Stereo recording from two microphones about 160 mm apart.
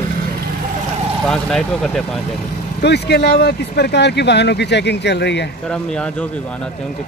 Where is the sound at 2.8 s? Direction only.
90° left.